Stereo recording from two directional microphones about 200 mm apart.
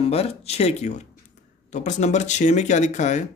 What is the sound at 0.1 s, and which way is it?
Speech, 30° left (ahead or behind).